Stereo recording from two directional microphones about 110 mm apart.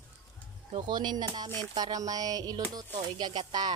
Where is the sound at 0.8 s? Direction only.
40° right (ahead or behind).